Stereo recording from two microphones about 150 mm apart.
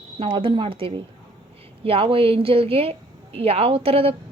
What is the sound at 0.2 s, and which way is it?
A woman's voice, 35° right (ahead or behind).